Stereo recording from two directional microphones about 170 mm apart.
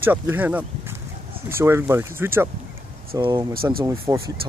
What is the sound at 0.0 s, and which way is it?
Speech, 10° right (ahead or behind).